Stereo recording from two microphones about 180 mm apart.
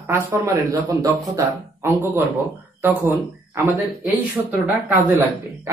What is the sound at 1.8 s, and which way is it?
Speech, 10° right (ahead or behind).